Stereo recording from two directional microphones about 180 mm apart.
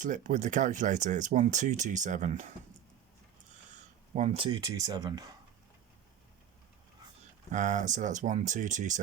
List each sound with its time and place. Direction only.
0.0 s speech: 45° right (ahead or behind)
4.1 s speech: 40° right (ahead or behind)
4.4 s speech: 20° right (ahead or behind)
7.5 s speech: 45° right (ahead or behind)